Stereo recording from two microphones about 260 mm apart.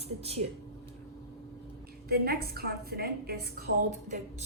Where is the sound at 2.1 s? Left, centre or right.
Right.